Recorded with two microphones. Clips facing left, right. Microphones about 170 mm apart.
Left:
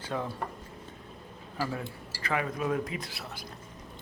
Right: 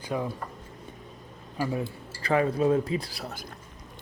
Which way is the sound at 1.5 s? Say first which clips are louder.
Right 4 dB; 20° right (ahead or behind).